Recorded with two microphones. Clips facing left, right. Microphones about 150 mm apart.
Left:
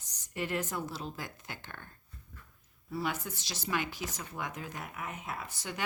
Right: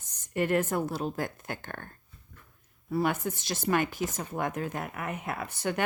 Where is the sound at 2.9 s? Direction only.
55° right (ahead or behind).